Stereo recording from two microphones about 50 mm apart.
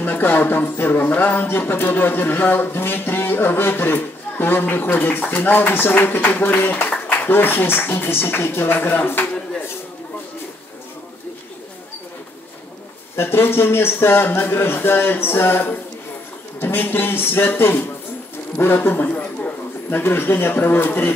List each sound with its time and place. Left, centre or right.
0.0 s speech: left
13.1 s speech: left
18.9 s a sound: left
19.9 s speech: left